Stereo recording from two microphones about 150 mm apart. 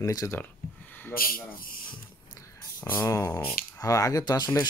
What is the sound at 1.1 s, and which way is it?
Speech, 75° left (ahead or behind).